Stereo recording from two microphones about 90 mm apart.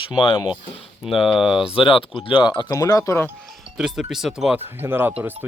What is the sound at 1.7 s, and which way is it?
Speech, 85° left.